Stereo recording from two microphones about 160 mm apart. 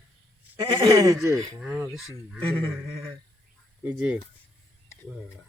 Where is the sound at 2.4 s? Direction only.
10° left (ahead or behind).